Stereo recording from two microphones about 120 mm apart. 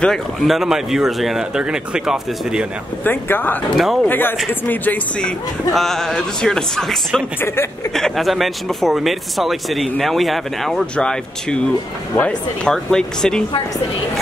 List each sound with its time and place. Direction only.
0.0 s speech: 5° left (ahead or behind)
3.0 s speech: 15° left (ahead or behind)
3.7 s speech: centre (ahead or behind)
4.1 s speech: 15° left (ahead or behind)
5.7 s speech: centre (ahead or behind)